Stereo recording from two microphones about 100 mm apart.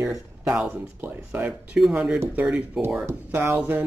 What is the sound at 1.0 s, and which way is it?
Speech, 20° right (ahead or behind).